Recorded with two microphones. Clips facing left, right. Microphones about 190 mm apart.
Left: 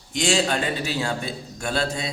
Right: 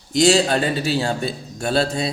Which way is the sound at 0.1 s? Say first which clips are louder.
Right 7 dB; 40° right (ahead or behind).